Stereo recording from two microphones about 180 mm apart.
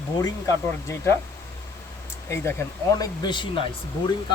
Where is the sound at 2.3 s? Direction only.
15° left (ahead or behind).